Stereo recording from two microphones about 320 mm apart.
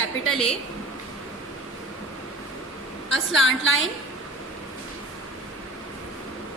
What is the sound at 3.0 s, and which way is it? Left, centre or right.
Speech, left.